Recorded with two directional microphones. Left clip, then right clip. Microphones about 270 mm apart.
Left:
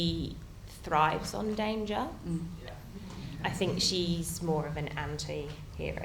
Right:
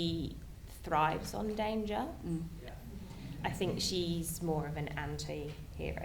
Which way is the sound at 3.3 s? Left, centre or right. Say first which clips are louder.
Left 4 dB; centre.